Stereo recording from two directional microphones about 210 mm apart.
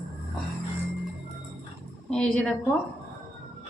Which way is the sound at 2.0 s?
5° left (ahead or behind).